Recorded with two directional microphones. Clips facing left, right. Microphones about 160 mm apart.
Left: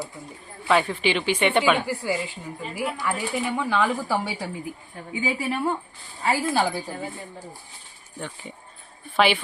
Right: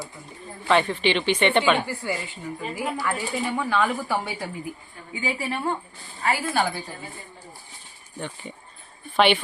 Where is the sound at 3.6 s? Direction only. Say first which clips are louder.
Even; 15° left (ahead or behind).